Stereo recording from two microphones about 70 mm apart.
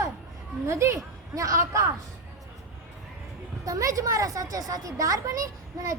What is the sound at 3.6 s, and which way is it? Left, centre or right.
A woman's voice, right.